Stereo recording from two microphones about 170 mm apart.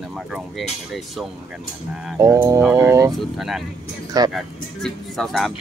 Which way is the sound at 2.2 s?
20° right (ahead or behind).